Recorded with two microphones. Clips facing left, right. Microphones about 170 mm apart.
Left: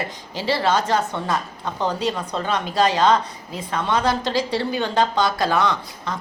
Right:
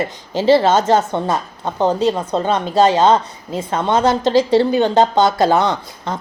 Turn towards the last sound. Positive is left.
turn(degrees=-25)  # may be behind; listen again after turning